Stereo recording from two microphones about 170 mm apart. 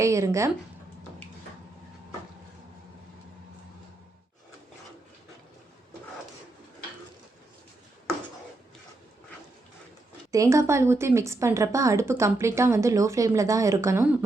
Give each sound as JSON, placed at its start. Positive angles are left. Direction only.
{"t": 0.0, "sound": "a woman's voice", "side_deg": -15}
{"t": 10.3, "sound": "a woman's voice", "side_deg": -20}